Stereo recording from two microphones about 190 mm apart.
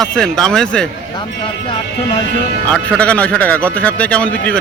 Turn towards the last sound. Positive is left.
turn(degrees=5)  # may be behind; listen again after turning